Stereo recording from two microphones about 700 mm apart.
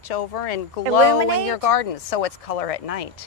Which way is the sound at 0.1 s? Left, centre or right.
Left.